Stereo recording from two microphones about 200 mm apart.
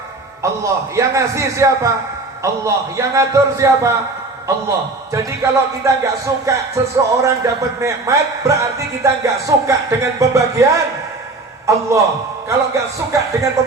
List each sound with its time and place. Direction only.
0.4 s music: 15° right (ahead or behind)
5.1 s music: 15° right (ahead or behind)
11.6 s a man's voice: 15° right (ahead or behind)
12.5 s music: 15° right (ahead or behind)